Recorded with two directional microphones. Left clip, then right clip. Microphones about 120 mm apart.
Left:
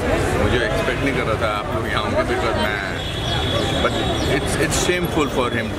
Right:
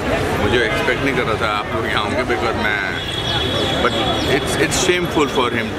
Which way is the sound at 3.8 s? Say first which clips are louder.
Right 3 dB; centre (ahead or behind).